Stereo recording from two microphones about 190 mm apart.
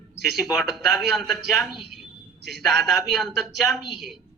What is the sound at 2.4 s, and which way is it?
Speech, 60° right (ahead or behind).